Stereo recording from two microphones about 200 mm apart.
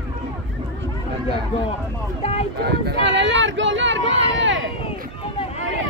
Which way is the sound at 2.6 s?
55° right (ahead or behind).